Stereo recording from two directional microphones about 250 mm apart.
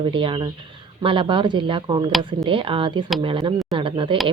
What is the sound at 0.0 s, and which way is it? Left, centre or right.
Speech, centre.